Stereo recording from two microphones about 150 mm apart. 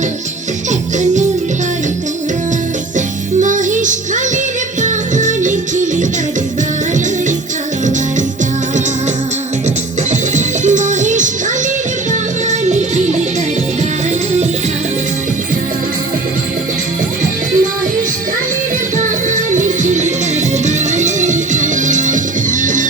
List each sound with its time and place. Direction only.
3.4 s music: 60° right (ahead or behind)
10.1 s music: 55° right (ahead or behind)
12.5 s music: 50° right (ahead or behind)
18.9 s music: 55° right (ahead or behind)